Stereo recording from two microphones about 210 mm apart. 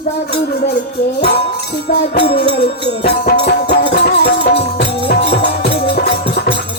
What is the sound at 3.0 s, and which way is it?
Music, 50° left (ahead or behind).